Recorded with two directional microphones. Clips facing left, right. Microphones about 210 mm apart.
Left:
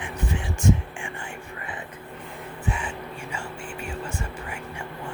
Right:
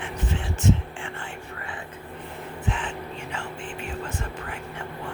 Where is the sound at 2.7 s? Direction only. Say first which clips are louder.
Even; 10° left (ahead or behind).